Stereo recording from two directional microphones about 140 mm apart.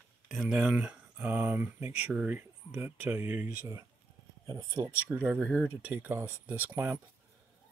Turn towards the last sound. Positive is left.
turn(degrees=-15)  # may be behind; listen again after turning